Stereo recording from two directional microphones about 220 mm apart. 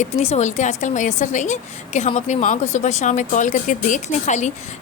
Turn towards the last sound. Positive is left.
turn(degrees=30)  # may be behind; listen again after turning